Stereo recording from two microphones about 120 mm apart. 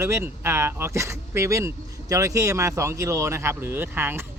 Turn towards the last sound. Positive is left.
turn(degrees=-15)  # may be behind; listen again after turning